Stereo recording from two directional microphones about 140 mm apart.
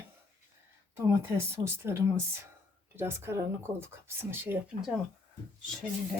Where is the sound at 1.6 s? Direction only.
20° right (ahead or behind).